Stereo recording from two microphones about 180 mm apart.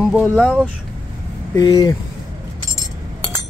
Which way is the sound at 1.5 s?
20° left (ahead or behind).